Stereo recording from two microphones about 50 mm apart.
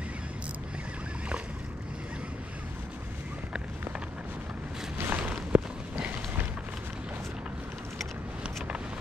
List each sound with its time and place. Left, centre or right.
4.9 s walk: right
5.3 s run: right